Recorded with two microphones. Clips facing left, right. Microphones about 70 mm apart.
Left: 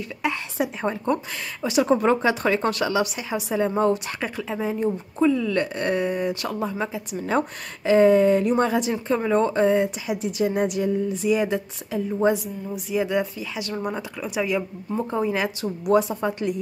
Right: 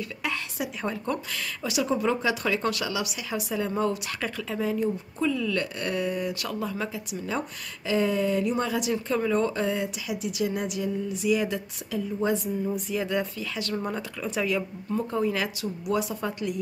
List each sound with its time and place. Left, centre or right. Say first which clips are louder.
0.2 s speech: left 7 dB; left
1.8 s speech: left 7 dB; left
3.3 s speech: left 5 dB; left
7.2 s speech: left 9 dB; left
10.7 s music: left 6 dB; left
11.2 s speech: left 2 dB; left
12.9 s speech: left 9 dB; centre
15.8 s speech: left 8 dB; left